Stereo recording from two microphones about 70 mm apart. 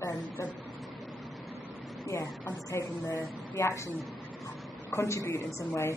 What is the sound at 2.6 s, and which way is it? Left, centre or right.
Speech, left.